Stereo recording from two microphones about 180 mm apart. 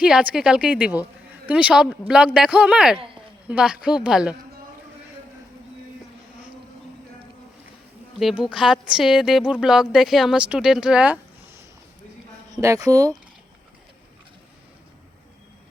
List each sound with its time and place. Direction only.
0.0 s a woman's voice: 5° right (ahead or behind)
8.2 s speech: centre (ahead or behind)
12.5 s speech: 20° right (ahead or behind)